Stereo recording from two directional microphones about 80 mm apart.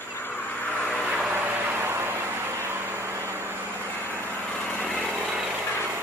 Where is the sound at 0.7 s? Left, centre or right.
Centre.